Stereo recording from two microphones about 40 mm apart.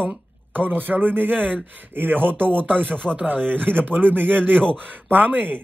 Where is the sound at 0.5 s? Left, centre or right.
Right.